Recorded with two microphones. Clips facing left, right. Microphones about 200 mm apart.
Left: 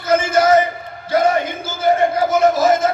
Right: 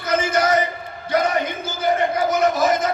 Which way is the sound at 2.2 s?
25° left (ahead or behind).